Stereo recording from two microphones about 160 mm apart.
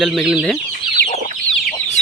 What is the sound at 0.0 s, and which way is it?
Speech, 5° right (ahead or behind).